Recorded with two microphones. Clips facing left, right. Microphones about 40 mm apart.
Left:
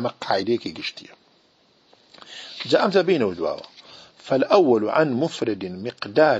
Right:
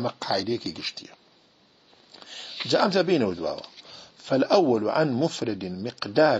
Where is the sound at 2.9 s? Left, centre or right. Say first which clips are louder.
Left 3 dB; left.